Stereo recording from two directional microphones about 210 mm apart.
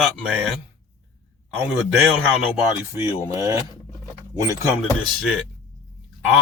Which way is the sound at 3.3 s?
15° right (ahead or behind).